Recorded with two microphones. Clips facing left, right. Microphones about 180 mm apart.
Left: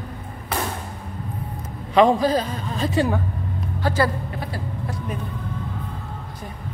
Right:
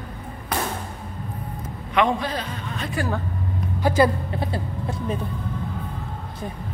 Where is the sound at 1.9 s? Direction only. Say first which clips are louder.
Left 6 dB; 35° left (ahead or behind).